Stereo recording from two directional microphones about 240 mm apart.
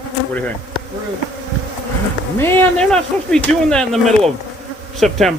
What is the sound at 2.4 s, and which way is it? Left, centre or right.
Speech, centre.